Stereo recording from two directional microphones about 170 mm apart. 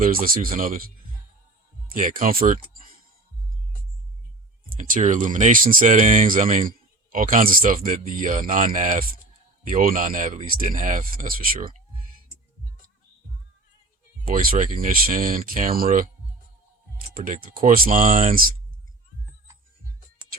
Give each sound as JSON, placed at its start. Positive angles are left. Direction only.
{"t": 0.0, "sound": "speech", "side_deg": -55}
{"t": 1.9, "sound": "speech", "side_deg": -50}
{"t": 4.8, "sound": "speech", "side_deg": -45}
{"t": 14.3, "sound": "speech", "side_deg": -55}
{"t": 17.2, "sound": "speech", "side_deg": -55}